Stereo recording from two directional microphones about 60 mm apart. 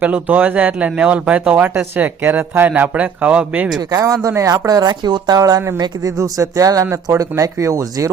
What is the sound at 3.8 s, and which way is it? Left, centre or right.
Speech, right.